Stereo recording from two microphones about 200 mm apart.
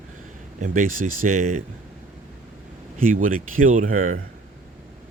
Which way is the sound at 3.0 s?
40° right (ahead or behind).